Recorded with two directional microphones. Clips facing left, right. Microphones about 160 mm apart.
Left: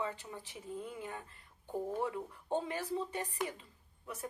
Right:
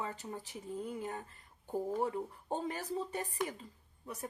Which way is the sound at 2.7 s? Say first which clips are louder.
Even; 45° right (ahead or behind).